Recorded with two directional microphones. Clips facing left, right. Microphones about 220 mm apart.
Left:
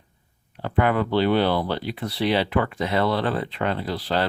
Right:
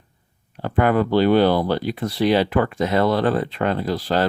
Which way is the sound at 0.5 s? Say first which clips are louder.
Right 3 dB; 45° right (ahead or behind).